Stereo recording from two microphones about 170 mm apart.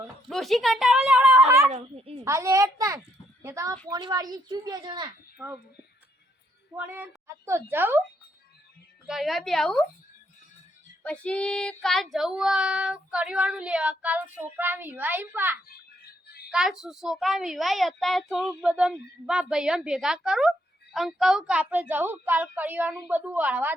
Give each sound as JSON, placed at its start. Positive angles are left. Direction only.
{"t": 0.3, "sound": "speech", "side_deg": 0}
{"t": 1.7, "sound": "a child's voice", "side_deg": -35}
{"t": 2.2, "sound": "a woman's voice", "side_deg": -15}
{"t": 6.7, "sound": "a woman's voice", "side_deg": -10}
{"t": 9.0, "sound": "speech", "side_deg": 0}
{"t": 11.0, "sound": "speech", "side_deg": 5}
{"t": 16.2, "sound": "a sound", "side_deg": 70}
{"t": 16.5, "sound": "a child's voice", "side_deg": -5}